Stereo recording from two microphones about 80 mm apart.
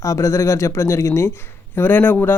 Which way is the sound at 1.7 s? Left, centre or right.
Left.